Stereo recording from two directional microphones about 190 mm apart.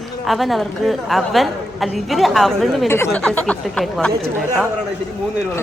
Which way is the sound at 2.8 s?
15° left (ahead or behind).